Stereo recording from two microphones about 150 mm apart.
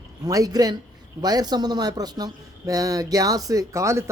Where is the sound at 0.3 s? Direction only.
25° right (ahead or behind).